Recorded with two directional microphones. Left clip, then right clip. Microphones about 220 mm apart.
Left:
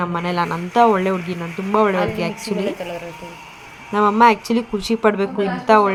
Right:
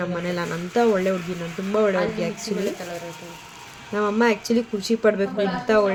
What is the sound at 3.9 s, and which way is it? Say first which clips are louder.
Speech: left 8 dB; 15° left (ahead or behind).